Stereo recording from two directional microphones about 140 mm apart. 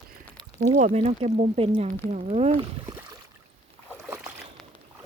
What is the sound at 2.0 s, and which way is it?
Speech, 55° right (ahead or behind).